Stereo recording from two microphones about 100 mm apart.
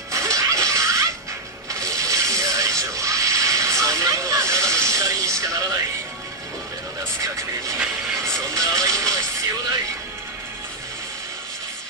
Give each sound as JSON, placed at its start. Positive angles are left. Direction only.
{"t": 0.1, "sound": "music", "side_deg": -30}
{"t": 1.7, "sound": "ratchet", "side_deg": -35}
{"t": 7.3, "sound": "speech", "side_deg": -30}